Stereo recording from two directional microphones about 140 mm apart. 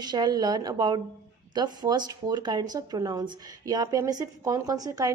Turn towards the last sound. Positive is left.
turn(degrees=-25)  # may be behind; listen again after turning